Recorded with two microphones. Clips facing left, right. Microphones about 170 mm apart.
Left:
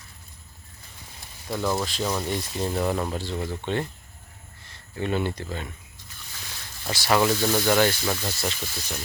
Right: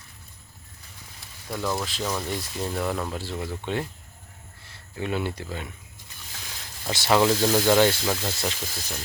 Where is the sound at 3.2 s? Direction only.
5° right (ahead or behind).